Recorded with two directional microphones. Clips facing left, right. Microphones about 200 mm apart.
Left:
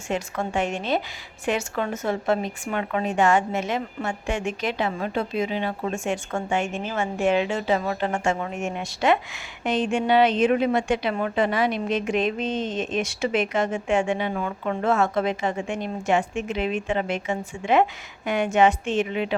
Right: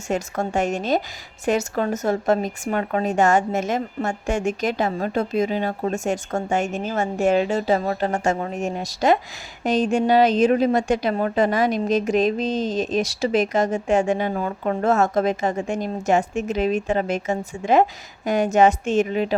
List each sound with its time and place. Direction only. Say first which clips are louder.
0.1 s a woman's voice: right 3 dB; 45° right (ahead or behind)